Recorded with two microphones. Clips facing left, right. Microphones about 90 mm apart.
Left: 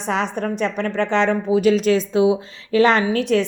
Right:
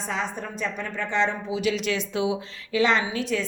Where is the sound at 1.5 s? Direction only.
40° left (ahead or behind).